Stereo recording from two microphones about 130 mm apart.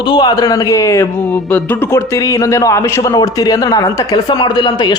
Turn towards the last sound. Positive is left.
turn(degrees=35)  # may be behind; listen again after turning